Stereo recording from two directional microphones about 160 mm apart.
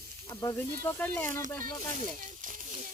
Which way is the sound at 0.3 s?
25° left (ahead or behind).